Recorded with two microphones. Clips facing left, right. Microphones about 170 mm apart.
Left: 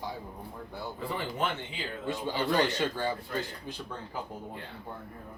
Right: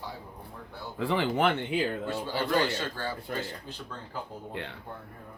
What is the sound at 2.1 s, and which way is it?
Speech, 15° left (ahead or behind).